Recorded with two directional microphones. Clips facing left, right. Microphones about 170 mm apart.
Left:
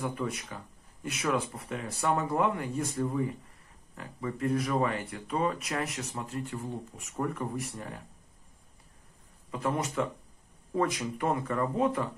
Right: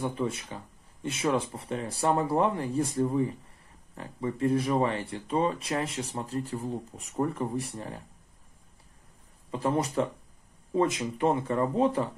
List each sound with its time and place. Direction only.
0.0 s speech: 25° right (ahead or behind)
9.5 s speech: 30° right (ahead or behind)